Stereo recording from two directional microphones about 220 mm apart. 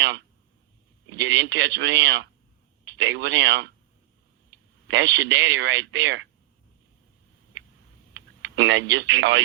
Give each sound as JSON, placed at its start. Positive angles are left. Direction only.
{"t": 1.1, "sound": "speech", "side_deg": -55}
{"t": 4.9, "sound": "speech", "side_deg": -55}
{"t": 7.5, "sound": "a sound", "side_deg": -55}
{"t": 8.1, "sound": "speech", "side_deg": -55}